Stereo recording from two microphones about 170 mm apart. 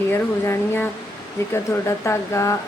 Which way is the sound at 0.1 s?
15° left (ahead or behind).